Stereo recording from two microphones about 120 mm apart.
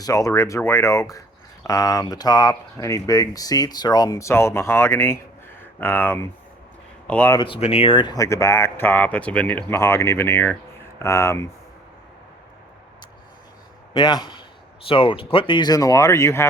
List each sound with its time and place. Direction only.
0.0 s speech: 30° left (ahead or behind)
7.3 s speech: 45° left (ahead or behind)
8.1 s speech: 25° left (ahead or behind)
13.9 s a man's voice: 40° left (ahead or behind); by 16.5 s 20° left (ahead or behind)